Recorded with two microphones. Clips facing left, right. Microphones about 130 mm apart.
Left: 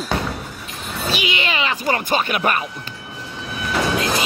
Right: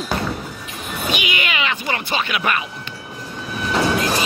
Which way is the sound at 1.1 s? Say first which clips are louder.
Left 1 dB; 30° left (ahead or behind).